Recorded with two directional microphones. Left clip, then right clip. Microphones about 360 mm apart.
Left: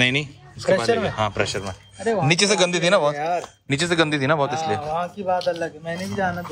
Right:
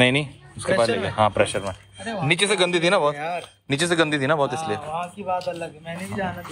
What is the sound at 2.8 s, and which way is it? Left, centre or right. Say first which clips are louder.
Speech: left 2 dB; left.